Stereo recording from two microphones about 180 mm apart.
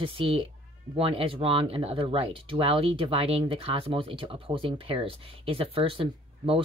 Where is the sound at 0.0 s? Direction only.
30° right (ahead or behind).